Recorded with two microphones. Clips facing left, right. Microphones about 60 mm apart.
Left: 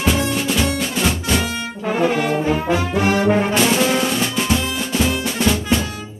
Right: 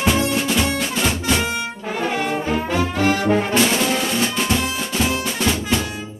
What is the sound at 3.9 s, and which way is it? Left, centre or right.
Music, centre.